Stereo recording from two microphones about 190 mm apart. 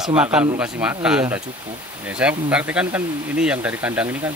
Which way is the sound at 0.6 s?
5° right (ahead or behind).